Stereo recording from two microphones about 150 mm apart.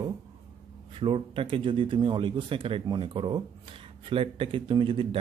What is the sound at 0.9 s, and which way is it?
Speech, 35° right (ahead or behind).